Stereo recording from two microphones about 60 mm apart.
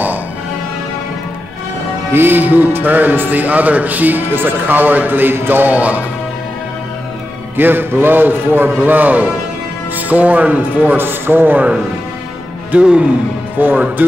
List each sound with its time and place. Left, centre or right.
2.1 s speech: right
7.5 s a man's voice: right
12.7 s speech: centre
13.6 s speech: right